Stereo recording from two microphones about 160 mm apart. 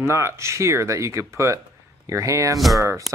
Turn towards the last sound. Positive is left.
turn(degrees=-20)  # may be behind; listen again after turning